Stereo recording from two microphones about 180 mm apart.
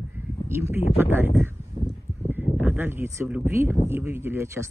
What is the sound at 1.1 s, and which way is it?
Speech, 10° right (ahead or behind).